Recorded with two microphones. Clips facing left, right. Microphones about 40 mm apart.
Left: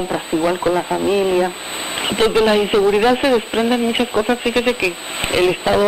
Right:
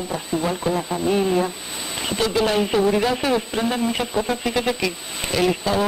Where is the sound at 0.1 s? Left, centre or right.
Left.